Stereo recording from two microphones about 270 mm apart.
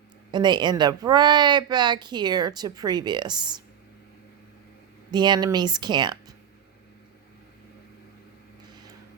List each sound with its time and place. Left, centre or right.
0.3 s speech: centre
5.1 s speech: centre